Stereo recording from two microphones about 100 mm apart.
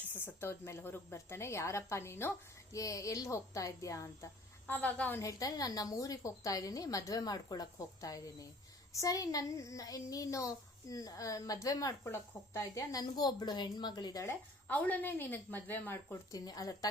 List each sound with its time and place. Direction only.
0.1 s a woman's voice: 20° left (ahead or behind)
4.6 s speech: 20° left (ahead or behind)
5.2 s a woman's voice: 35° left (ahead or behind)
14.3 s speech: 15° left (ahead or behind)
16.3 s a woman's voice: 35° left (ahead or behind)